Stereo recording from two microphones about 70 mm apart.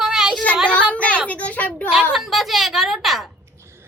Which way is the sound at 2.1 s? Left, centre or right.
Centre.